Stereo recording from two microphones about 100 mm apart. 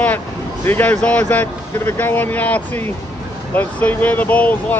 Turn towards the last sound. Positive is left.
turn(degrees=15)  # may be behind; listen again after turning